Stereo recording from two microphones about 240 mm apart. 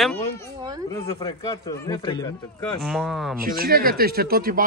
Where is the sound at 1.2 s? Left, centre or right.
Centre.